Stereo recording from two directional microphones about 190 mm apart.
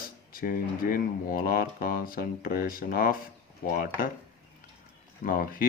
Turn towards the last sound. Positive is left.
turn(degrees=50)  # may be behind; listen again after turning